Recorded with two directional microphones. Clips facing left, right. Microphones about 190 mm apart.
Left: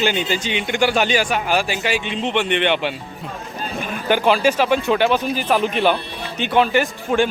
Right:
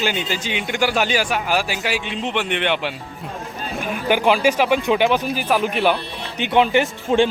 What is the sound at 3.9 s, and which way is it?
Speech, 15° right (ahead or behind).